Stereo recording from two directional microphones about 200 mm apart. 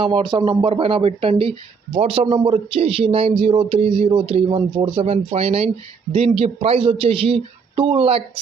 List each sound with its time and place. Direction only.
0.0 s speech: 25° right (ahead or behind)